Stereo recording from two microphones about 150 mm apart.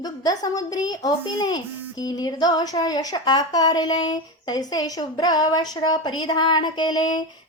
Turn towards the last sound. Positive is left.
turn(degrees=25)  # may be behind; listen again after turning